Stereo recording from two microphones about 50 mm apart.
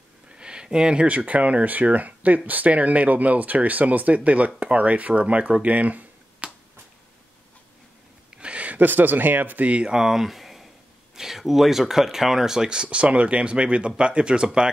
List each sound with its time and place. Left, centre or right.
0.3 s speech: centre
8.4 s a sound: right
8.7 s speech: right
9.8 s speech: centre